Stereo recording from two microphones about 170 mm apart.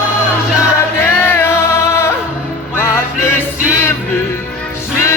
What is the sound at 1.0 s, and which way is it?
Music, 15° left (ahead or behind).